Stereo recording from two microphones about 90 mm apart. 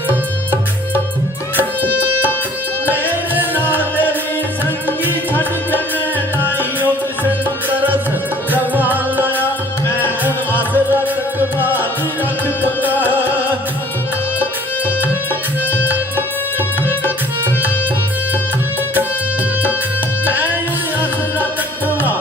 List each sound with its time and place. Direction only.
0.1 s music: 20° right (ahead or behind)
4.9 s music: 20° left (ahead or behind)
6.4 s music: 20° right (ahead or behind)
20.2 s music: 20° right (ahead or behind)